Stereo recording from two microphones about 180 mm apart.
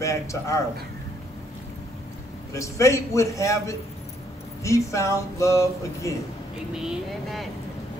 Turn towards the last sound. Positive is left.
turn(degrees=0)  # may be behind; listen again after turning